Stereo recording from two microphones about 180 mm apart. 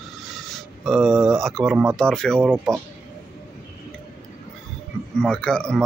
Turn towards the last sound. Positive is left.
turn(degrees=5)  # may be behind; listen again after turning